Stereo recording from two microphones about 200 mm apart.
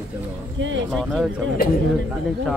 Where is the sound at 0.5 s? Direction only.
70° right (ahead or behind).